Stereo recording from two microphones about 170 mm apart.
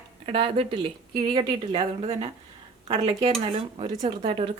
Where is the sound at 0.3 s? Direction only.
30° right (ahead or behind).